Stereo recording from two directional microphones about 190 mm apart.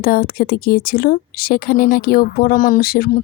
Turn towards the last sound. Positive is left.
turn(degrees=50)  # may be behind; listen again after turning